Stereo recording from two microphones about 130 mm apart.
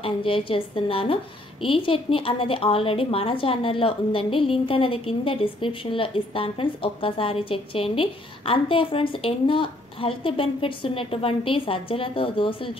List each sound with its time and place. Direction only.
0.0 s a woman's voice: 45° left (ahead or behind)